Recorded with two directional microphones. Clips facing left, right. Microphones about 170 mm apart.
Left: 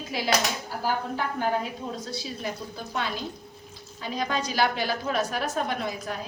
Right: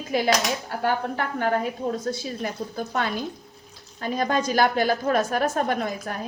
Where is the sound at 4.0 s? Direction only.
50° right (ahead or behind).